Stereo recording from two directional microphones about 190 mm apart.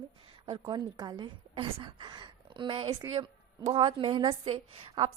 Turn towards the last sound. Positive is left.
turn(degrees=-25)  # may be behind; listen again after turning